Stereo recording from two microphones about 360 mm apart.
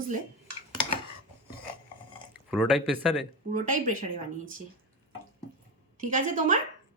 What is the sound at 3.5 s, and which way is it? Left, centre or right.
Speech, right.